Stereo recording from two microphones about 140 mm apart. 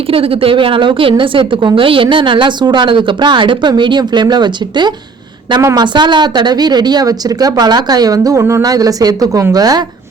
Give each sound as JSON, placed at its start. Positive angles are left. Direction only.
{"t": 0.1, "sound": "a woman's voice", "side_deg": -40}